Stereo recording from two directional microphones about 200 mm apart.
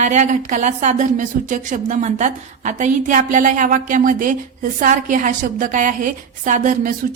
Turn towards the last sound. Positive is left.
turn(degrees=-40)  # may be behind; listen again after turning